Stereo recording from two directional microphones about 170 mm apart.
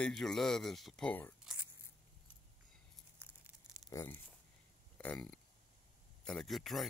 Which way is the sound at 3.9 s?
15° left (ahead or behind).